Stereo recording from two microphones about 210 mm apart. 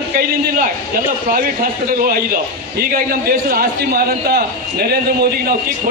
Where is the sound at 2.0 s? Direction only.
45° right (ahead or behind).